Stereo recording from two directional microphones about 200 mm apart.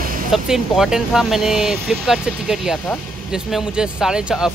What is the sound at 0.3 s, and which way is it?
Speech, centre (ahead or behind).